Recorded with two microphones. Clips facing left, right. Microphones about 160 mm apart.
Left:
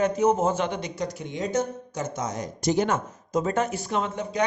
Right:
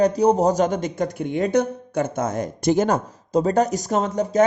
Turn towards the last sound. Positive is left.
turn(degrees=-40)  # may be behind; listen again after turning